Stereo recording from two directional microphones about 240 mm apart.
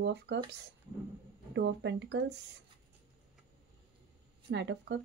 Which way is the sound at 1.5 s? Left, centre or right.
Right.